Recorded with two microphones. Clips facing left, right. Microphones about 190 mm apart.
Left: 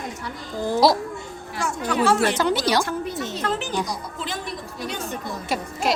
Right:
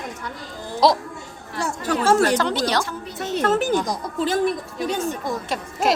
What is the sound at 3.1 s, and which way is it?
A woman's voice, 45° right (ahead or behind).